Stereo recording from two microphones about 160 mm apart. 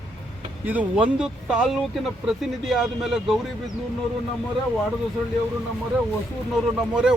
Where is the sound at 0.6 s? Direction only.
10° right (ahead or behind).